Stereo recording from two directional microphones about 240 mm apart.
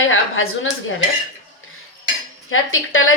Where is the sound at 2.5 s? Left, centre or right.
Left.